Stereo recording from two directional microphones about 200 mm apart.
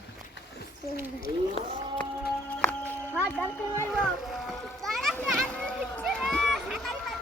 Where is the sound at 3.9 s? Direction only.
Centre (ahead or behind).